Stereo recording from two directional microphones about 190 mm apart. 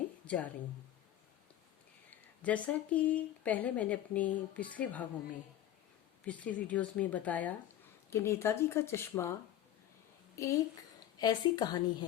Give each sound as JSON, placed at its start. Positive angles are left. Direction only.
{"t": 0.3, "sound": "speech", "side_deg": 10}
{"t": 2.0, "sound": "speech", "side_deg": 5}
{"t": 6.2, "sound": "speech", "side_deg": 5}
{"t": 10.3, "sound": "a woman's voice", "side_deg": 15}